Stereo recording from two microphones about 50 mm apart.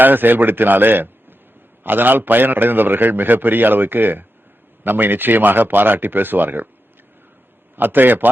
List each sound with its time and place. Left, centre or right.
0.0 s a man's voice: right
7.8 s a man's voice: right